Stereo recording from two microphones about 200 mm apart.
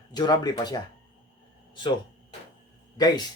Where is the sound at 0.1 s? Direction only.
20° left (ahead or behind).